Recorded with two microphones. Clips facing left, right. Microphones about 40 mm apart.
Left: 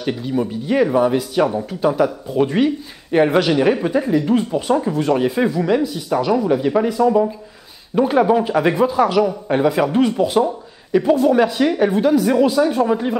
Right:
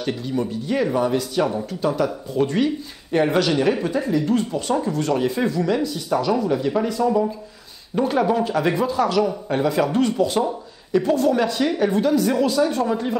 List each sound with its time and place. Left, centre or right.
0.0 s speech: centre